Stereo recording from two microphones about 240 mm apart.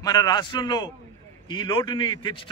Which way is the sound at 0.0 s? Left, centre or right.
Centre.